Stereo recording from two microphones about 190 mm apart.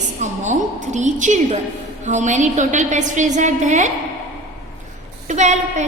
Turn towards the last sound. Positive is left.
turn(degrees=-40)  # may be behind; listen again after turning